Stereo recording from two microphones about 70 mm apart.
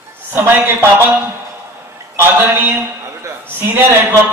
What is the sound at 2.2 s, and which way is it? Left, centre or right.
A man's voice, right.